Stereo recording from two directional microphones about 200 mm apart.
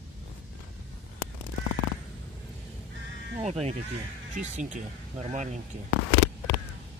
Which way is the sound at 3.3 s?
35° right (ahead or behind).